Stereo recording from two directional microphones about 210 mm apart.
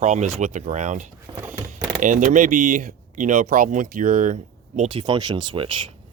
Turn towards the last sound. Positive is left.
turn(degrees=-25)  # may be behind; listen again after turning